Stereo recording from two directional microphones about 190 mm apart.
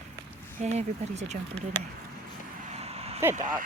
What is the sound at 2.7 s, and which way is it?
Vehicle, 35° right (ahead or behind).